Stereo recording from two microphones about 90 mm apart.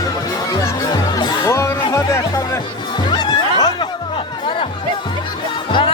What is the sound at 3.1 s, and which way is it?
Music, 55° left (ahead or behind).